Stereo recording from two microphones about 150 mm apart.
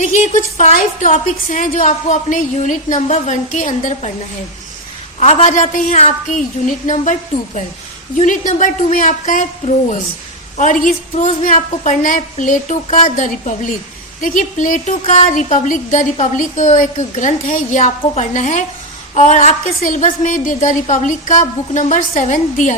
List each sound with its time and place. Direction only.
0.0 s a woman's voice: 55° left (ahead or behind)
5.2 s a woman's voice: 50° left (ahead or behind)